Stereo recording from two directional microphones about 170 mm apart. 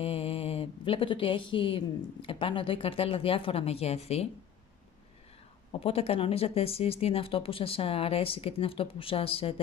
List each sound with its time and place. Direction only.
0.0 s a woman's voice: 35° left (ahead or behind)
5.7 s speech: 35° left (ahead or behind)